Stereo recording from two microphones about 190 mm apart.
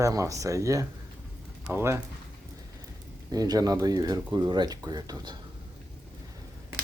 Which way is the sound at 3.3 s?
20° right (ahead or behind).